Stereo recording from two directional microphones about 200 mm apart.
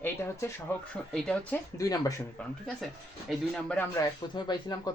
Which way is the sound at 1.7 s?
15° left (ahead or behind).